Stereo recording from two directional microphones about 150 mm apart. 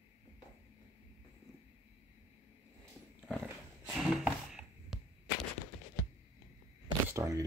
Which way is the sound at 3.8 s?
5° right (ahead or behind).